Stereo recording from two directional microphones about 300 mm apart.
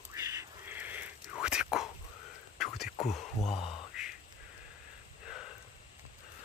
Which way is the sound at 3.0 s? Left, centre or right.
Left.